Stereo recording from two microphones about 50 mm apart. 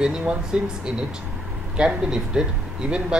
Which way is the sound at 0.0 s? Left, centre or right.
Right.